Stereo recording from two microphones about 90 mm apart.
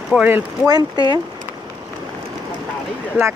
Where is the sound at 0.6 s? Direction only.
50° right (ahead or behind).